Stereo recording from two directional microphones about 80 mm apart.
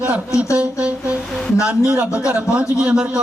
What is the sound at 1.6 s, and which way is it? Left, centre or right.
A man's voice, centre.